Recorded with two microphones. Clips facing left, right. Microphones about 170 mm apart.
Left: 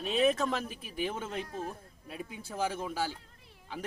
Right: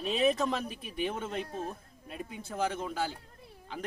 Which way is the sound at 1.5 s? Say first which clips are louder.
Right 1 dB; 30° right (ahead or behind).